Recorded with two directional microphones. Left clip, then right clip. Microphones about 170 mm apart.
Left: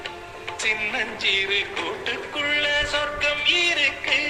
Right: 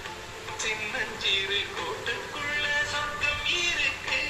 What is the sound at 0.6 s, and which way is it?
Music, 35° left (ahead or behind).